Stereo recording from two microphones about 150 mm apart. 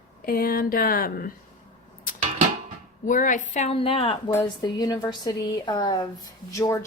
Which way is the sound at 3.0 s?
60° left (ahead or behind).